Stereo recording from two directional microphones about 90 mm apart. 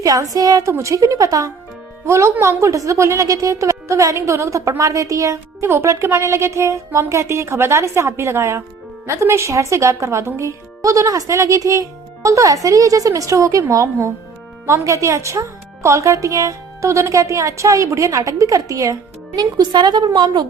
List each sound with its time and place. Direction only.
0.0 s a woman's voice: 40° right (ahead or behind)